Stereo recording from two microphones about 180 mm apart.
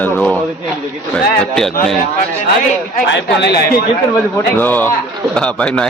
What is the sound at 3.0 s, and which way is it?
Speech, 75° left (ahead or behind).